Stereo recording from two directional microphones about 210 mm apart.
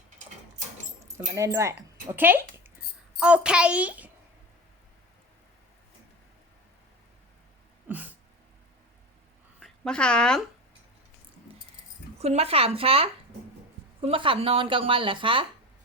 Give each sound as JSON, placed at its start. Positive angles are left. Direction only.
{"t": 1.4, "sound": "a child's voice", "side_deg": -15}
{"t": 7.9, "sound": "a sound", "side_deg": -10}
{"t": 9.6, "sound": "speech", "side_deg": 5}
{"t": 12.2, "sound": "speech", "side_deg": -30}